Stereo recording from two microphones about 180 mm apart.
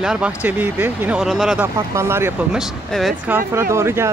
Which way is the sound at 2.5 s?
Centre (ahead or behind).